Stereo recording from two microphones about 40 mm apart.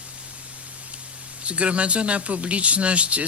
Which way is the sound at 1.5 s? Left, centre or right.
Right.